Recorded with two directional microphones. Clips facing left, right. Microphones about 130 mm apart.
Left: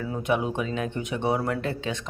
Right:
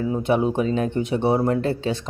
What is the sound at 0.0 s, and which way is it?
Speech, 30° right (ahead or behind).